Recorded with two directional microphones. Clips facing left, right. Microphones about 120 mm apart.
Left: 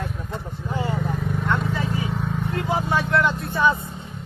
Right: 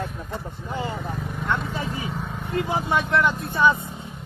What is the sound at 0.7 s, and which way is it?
Vehicle, 20° right (ahead or behind).